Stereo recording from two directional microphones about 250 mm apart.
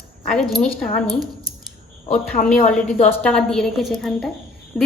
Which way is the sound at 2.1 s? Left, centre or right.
Left.